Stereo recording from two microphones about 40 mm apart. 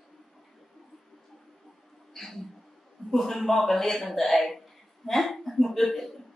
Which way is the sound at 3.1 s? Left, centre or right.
Centre.